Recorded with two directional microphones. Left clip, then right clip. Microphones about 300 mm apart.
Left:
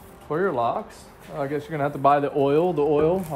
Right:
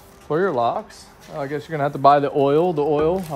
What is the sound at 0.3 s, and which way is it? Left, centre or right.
Speech, right.